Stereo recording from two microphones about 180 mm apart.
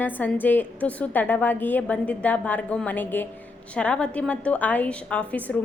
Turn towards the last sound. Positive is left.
turn(degrees=10)  # may be behind; listen again after turning